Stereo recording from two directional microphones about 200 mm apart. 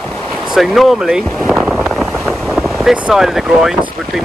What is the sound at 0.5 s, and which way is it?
Speech, centre (ahead or behind).